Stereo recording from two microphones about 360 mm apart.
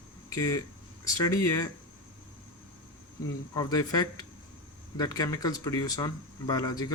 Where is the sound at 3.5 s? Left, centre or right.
Centre.